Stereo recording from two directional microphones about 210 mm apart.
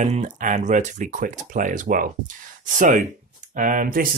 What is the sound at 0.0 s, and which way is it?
Speech, 35° right (ahead or behind).